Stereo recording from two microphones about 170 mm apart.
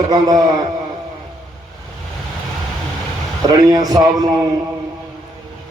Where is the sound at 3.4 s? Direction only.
20° right (ahead or behind).